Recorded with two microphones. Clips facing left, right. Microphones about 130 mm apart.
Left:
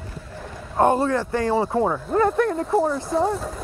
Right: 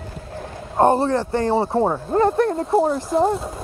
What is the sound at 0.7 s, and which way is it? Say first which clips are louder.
A man's voice: right 2 dB; 30° right (ahead or behind).